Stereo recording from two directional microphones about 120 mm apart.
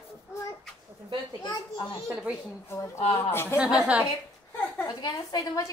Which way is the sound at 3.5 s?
20° left (ahead or behind).